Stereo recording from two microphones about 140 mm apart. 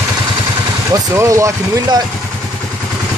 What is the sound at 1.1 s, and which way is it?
Speech, 20° right (ahead or behind).